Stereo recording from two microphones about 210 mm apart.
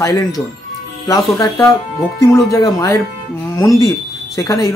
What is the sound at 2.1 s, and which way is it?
Speech, 15° left (ahead or behind).